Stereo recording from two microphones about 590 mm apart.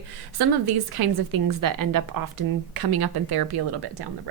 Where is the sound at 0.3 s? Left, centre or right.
Right.